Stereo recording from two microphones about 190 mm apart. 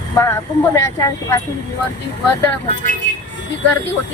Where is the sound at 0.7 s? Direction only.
15° left (ahead or behind).